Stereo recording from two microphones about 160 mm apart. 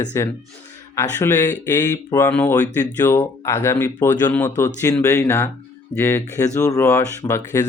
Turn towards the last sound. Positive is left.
turn(degrees=15)  # may be behind; listen again after turning